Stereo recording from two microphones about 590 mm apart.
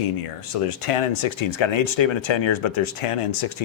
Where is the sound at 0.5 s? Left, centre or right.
Left.